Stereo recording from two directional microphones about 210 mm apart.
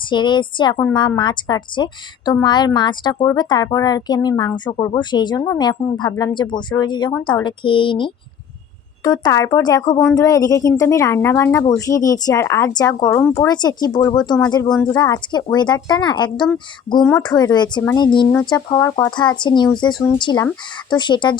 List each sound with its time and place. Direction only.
0.1 s a woman's voice: 20° left (ahead or behind)
9.2 s a woman's voice: 15° left (ahead or behind)